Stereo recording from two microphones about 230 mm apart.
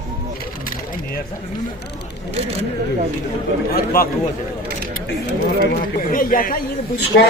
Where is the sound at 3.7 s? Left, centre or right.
Left.